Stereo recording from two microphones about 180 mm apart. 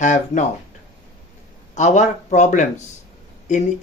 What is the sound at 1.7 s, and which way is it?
Speech, 40° left (ahead or behind).